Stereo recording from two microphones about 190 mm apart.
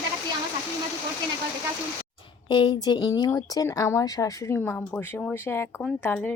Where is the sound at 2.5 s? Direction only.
25° left (ahead or behind).